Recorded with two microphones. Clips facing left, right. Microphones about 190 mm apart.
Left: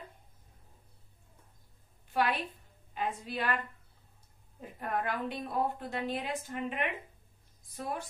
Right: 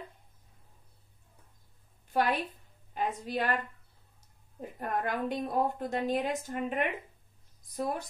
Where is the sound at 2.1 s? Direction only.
45° right (ahead or behind).